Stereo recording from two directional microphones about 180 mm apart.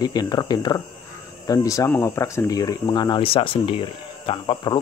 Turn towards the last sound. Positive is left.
turn(degrees=25)  # may be behind; listen again after turning